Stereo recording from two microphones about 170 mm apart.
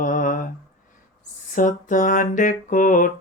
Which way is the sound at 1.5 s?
50° left (ahead or behind).